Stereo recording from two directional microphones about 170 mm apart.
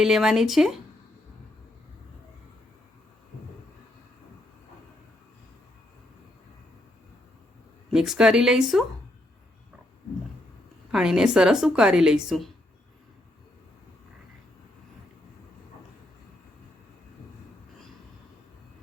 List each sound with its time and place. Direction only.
0.0 s a woman's voice: 5° right (ahead or behind)
7.9 s a woman's voice: 5° right (ahead or behind)
10.9 s a woman's voice: 5° right (ahead or behind)